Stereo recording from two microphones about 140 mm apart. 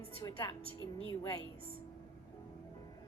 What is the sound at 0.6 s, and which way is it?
Speech, 35° right (ahead or behind).